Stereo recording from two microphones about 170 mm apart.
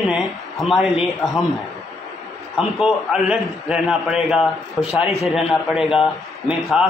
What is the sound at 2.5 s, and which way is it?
Speech, 5° right (ahead or behind).